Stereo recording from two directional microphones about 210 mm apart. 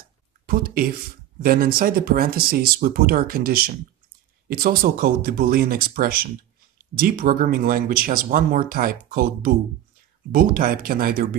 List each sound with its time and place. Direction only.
0.5 s speech: 45° right (ahead or behind)